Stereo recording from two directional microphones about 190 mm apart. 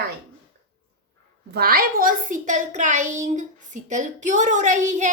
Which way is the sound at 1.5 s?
55° right (ahead or behind).